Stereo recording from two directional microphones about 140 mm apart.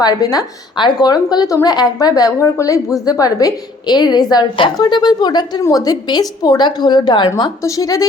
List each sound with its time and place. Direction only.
0.0 s a woman's voice: 30° left (ahead or behind)